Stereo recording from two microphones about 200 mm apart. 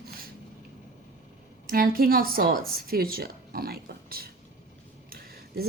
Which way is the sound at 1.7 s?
45° right (ahead or behind).